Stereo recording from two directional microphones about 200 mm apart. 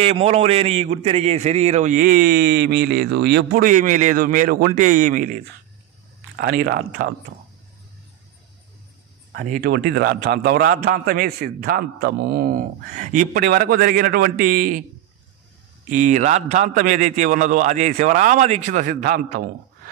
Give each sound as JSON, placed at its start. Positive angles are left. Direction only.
{"t": 0.0, "sound": "a man's voice", "side_deg": -30}
{"t": 3.6, "sound": "a man's voice", "side_deg": -40}
{"t": 6.3, "sound": "a man's voice", "side_deg": -50}
{"t": 9.4, "sound": "a man's voice", "side_deg": -50}
{"t": 15.9, "sound": "a man's voice", "side_deg": -40}